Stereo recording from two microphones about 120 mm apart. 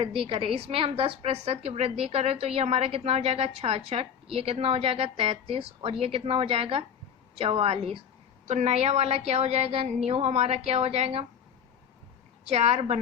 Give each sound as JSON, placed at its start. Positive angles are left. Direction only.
{"t": 0.0, "sound": "a woman's voice", "side_deg": -45}
{"t": 8.4, "sound": "a woman's voice", "side_deg": -70}
{"t": 12.5, "sound": "a woman's voice", "side_deg": -60}